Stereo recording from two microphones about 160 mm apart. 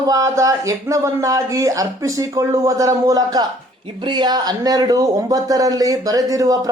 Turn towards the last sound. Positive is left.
turn(degrees=-20)  # may be behind; listen again after turning